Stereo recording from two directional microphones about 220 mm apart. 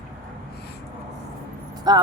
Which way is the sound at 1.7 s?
20° right (ahead or behind).